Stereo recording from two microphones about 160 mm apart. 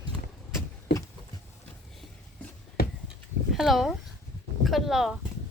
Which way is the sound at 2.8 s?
75° left (ahead or behind).